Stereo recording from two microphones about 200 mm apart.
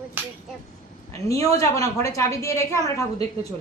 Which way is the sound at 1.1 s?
15° left (ahead or behind).